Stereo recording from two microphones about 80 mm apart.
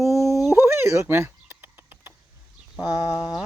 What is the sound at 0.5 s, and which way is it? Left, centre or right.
Speech, right.